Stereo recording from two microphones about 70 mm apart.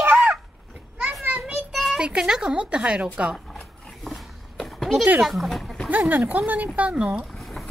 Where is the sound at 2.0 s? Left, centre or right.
Centre.